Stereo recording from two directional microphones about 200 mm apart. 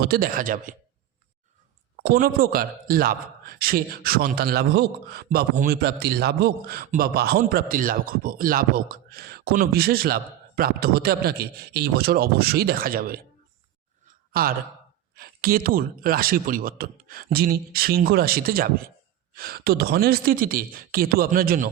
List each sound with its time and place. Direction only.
0.0 s a man's voice: 45° right (ahead or behind)
2.0 s a man's voice: 45° right (ahead or behind)
14.3 s a man's voice: 50° right (ahead or behind)